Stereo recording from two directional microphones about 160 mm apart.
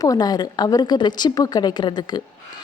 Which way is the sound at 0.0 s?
25° left (ahead or behind).